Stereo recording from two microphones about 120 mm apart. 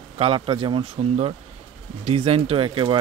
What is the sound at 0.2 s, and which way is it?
Speech, 45° right (ahead or behind).